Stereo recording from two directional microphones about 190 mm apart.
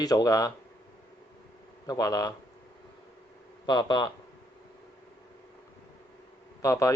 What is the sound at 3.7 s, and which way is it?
Speech, 25° left (ahead or behind).